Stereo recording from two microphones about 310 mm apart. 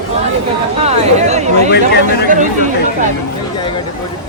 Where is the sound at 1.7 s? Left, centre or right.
Left.